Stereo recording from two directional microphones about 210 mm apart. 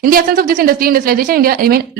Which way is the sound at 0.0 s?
45° right (ahead or behind).